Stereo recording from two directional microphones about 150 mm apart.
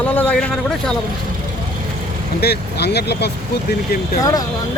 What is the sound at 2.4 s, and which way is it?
Speech, 90° left.